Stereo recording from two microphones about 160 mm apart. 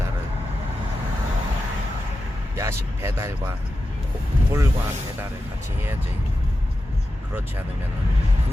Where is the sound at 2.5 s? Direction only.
15° right (ahead or behind).